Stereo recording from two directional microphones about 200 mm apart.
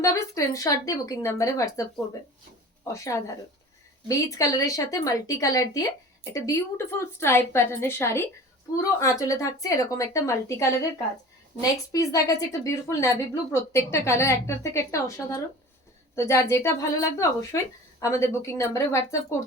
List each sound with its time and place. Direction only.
0.0 s a woman's voice: 15° left (ahead or behind)